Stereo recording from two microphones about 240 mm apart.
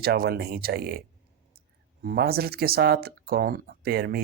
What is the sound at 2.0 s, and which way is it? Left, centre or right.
Speech, right.